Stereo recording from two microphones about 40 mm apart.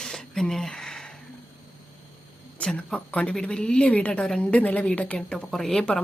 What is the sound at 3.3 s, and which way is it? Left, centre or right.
Speech, left.